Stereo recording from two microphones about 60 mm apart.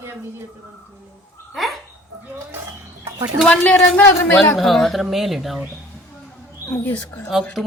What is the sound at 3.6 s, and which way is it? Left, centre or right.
Speech, left.